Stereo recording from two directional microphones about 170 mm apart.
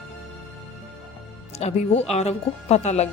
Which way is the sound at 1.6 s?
40° left (ahead or behind).